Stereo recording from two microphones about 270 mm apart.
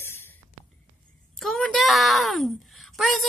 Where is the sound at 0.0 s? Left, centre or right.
Centre.